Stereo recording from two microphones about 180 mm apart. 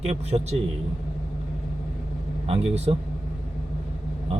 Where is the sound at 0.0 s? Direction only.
35° right (ahead or behind).